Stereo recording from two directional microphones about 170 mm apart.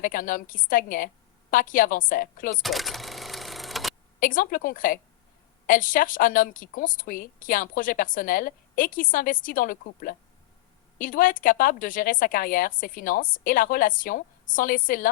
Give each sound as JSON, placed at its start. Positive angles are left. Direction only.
{"t": 0.0, "sound": "a woman's voice", "side_deg": 55}
{"t": 2.6, "sound": "a sound", "side_deg": 0}
{"t": 4.2, "sound": "a woman's voice", "side_deg": 55}